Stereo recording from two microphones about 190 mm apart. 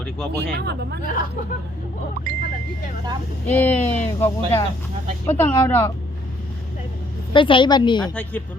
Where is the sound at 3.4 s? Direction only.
10° left (ahead or behind).